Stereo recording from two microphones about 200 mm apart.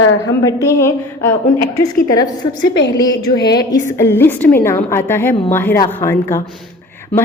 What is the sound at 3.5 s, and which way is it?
A woman's voice, 20° left (ahead or behind).